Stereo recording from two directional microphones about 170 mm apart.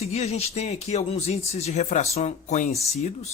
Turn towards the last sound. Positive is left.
turn(degrees=40)  # may be behind; listen again after turning